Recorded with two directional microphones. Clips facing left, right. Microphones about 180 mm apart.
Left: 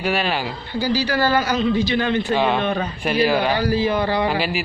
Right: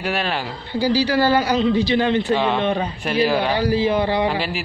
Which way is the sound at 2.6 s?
25° right (ahead or behind).